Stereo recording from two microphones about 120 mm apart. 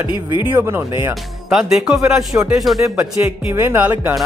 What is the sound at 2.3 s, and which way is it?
Speech, 25° right (ahead or behind).